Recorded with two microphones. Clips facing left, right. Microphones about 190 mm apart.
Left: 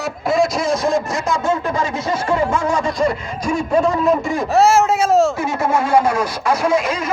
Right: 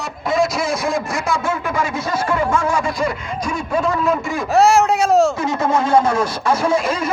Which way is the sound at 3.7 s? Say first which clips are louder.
Left 3 dB; 25° left (ahead or behind).